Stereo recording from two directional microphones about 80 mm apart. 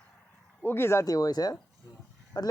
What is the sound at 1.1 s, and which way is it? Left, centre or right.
Speech, left.